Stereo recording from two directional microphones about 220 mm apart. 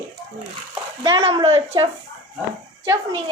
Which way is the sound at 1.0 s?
20° right (ahead or behind).